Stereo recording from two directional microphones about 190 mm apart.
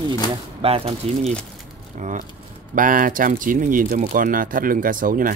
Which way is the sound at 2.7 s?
45° right (ahead or behind).